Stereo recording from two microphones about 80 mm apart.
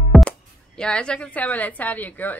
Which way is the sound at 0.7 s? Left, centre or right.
Centre.